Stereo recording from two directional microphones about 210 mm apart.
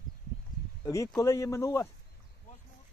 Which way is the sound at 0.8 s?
15° left (ahead or behind).